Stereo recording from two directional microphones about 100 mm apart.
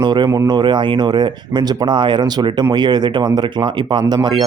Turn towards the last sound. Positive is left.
turn(degrees=-45)  # may be behind; listen again after turning